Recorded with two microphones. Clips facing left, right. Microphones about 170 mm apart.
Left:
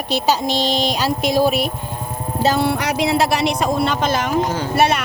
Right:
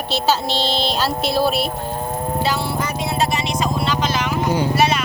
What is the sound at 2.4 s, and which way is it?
A woman's voice, 55° left (ahead or behind).